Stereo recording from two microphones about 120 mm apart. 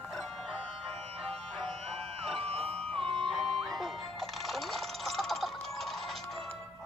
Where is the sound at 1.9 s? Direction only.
55° right (ahead or behind).